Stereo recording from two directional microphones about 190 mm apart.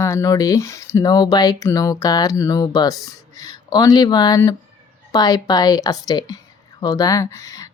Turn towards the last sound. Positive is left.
turn(degrees=20)  # may be behind; listen again after turning